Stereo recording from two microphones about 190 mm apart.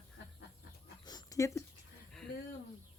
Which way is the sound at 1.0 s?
20° left (ahead or behind).